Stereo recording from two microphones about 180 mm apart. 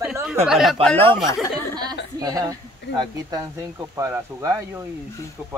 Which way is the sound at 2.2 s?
20° right (ahead or behind).